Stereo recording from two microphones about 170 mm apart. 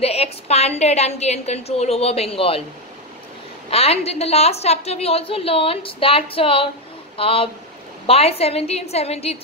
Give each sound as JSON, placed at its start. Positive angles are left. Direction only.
{"t": 0.0, "sound": "a woman's voice", "side_deg": 35}
{"t": 3.7, "sound": "a woman's voice", "side_deg": 35}